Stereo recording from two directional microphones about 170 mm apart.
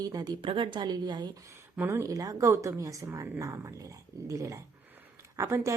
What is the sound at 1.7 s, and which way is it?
A woman's voice, 15° right (ahead or behind).